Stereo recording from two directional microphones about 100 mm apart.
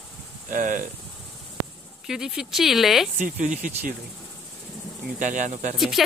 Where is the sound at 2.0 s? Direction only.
5° right (ahead or behind).